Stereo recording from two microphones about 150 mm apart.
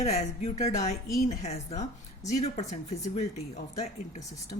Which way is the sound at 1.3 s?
50° left (ahead or behind).